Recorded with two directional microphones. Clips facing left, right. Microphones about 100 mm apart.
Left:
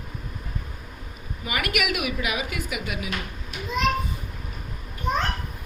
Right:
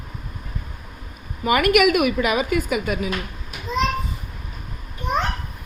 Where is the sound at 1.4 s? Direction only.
50° right (ahead or behind).